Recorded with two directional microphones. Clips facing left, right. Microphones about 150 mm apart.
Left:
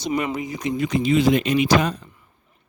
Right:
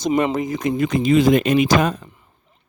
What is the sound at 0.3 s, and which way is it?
Speech, 50° right (ahead or behind).